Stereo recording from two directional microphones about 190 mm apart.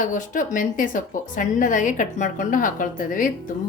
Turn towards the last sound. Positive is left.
turn(degrees=45)  # may be behind; listen again after turning